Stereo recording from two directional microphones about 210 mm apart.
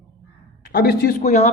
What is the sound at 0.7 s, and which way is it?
Speech, 45° left (ahead or behind).